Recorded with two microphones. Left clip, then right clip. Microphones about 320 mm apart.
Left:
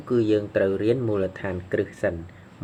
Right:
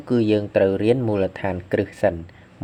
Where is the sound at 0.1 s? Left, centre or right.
Right.